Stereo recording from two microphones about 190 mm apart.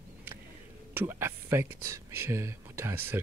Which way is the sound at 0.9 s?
10° right (ahead or behind).